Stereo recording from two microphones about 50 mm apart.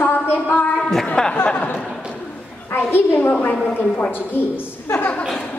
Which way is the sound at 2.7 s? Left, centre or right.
Left.